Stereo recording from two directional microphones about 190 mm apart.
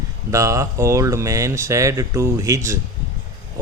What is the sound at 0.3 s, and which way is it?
Speech, 15° right (ahead or behind).